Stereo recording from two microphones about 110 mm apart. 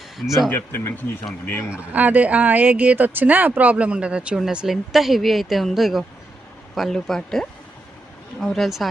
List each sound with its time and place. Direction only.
0.2 s speech: centre (ahead or behind)
0.5 s speech: 20° left (ahead or behind)
1.7 s speech: 15° right (ahead or behind)